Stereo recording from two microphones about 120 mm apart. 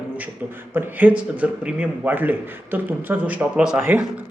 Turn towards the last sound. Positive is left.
turn(degrees=-10)  # may be behind; listen again after turning